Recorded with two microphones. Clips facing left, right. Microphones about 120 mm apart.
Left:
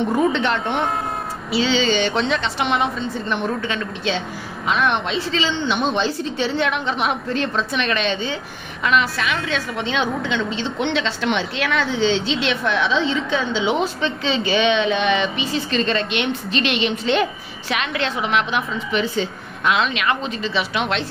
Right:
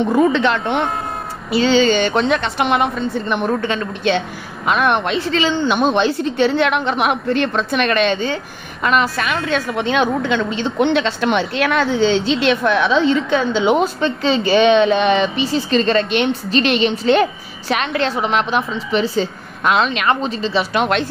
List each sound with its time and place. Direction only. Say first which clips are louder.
0.4 s speech: right 4 dB; 90° right
1.5 s a woman's voice: right 5 dB; 50° right (ahead or behind); by 20.6 s 35° right (ahead or behind)
20.7 s speech: right 7 dB; 45° right (ahead or behind)